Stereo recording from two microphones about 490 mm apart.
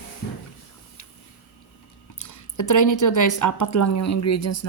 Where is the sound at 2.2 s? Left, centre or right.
Left.